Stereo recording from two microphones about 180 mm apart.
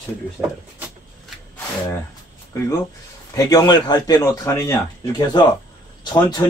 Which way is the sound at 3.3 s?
20° left (ahead or behind).